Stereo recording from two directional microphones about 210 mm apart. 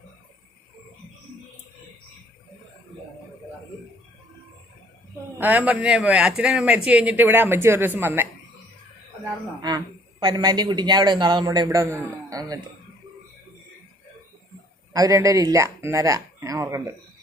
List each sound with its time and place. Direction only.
5.4 s speech: 10° right (ahead or behind)
9.6 s a man's voice: 20° right (ahead or behind)
14.9 s speech: 15° right (ahead or behind)